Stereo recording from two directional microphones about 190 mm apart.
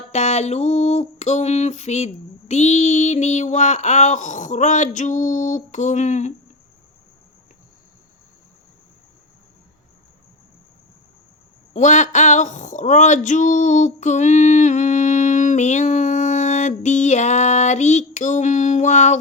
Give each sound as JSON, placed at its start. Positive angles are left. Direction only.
{"t": 0.1, "sound": "speech", "side_deg": 35}
{"t": 11.7, "sound": "speech", "side_deg": 40}